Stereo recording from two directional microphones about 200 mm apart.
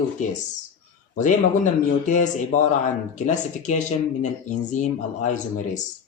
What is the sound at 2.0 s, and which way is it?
Speech, 40° left (ahead or behind).